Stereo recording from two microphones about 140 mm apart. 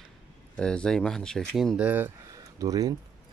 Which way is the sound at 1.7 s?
10° right (ahead or behind).